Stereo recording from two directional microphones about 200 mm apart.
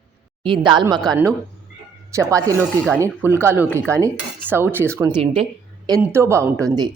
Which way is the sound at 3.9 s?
15° right (ahead or behind).